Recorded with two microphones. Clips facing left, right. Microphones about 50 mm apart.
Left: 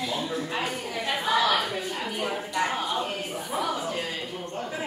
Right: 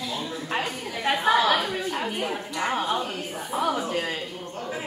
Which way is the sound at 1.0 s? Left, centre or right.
Right.